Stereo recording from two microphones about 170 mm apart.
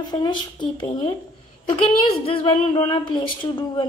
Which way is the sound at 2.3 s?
30° left (ahead or behind).